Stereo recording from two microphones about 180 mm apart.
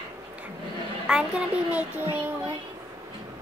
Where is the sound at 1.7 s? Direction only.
10° right (ahead or behind).